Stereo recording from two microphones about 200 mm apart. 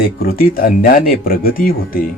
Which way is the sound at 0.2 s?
45° left (ahead or behind).